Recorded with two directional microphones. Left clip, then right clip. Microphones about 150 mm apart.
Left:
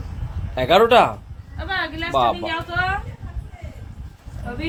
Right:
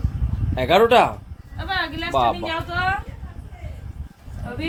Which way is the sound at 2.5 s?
90° right.